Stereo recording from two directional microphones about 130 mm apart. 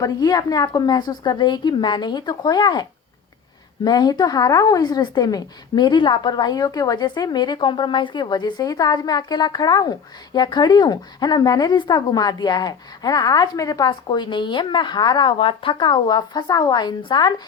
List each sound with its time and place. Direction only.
0.0 s speech: 30° left (ahead or behind)
3.8 s speech: 30° left (ahead or behind)